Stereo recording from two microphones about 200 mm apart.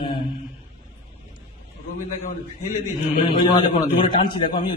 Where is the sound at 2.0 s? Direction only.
35° left (ahead or behind).